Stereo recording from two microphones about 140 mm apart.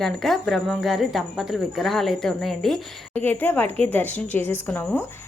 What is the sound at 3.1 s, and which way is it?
A woman's voice, 15° left (ahead or behind).